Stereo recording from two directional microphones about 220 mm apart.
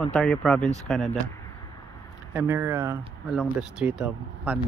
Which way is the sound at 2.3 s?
10° right (ahead or behind).